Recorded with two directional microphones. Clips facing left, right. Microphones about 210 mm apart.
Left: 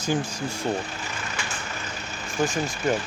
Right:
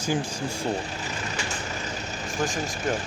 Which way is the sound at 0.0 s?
10° right (ahead or behind).